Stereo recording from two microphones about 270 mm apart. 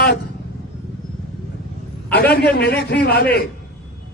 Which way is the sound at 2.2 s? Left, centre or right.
Left.